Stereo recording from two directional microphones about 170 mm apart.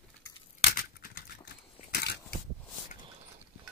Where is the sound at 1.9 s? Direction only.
75° left (ahead or behind).